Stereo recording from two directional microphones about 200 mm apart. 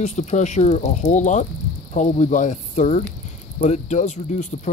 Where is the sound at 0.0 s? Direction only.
35° left (ahead or behind).